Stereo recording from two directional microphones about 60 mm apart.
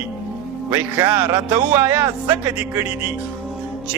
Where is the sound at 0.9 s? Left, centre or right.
Right.